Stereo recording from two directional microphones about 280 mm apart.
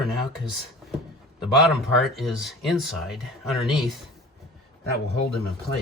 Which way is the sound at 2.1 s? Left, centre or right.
Centre.